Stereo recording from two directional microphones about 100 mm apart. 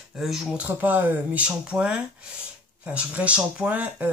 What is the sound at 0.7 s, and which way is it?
Speech, 20° right (ahead or behind).